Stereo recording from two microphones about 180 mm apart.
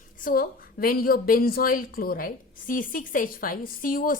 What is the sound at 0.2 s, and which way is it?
A woman's voice, 50° left (ahead or behind).